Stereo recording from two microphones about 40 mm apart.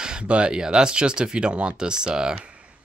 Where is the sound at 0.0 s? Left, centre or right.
Right.